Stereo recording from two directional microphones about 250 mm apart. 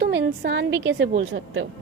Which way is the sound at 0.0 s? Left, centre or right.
Right.